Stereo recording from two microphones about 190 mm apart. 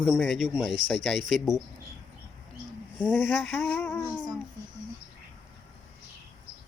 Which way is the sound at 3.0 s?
10° left (ahead or behind).